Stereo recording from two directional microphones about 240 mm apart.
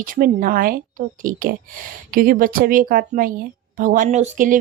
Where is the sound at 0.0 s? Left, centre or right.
Right.